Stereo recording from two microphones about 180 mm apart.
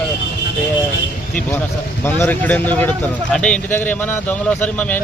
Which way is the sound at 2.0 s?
10° left (ahead or behind).